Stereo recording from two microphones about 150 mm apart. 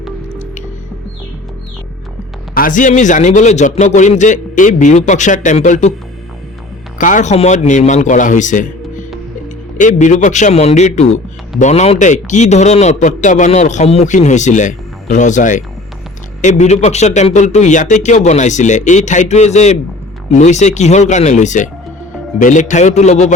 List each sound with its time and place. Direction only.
2.6 s a man's voice: 60° left (ahead or behind)
7.0 s a man's voice: 55° left (ahead or behind)
9.7 s a man's voice: 55° left (ahead or behind)